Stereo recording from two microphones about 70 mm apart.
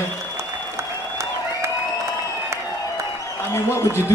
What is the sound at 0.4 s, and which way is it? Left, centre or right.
Applause, right.